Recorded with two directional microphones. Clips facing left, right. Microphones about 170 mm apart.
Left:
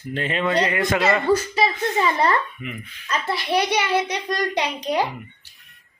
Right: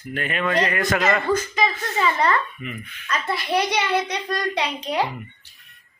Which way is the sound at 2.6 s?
15° left (ahead or behind).